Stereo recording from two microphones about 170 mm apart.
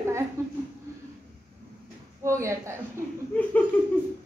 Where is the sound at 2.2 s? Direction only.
15° right (ahead or behind).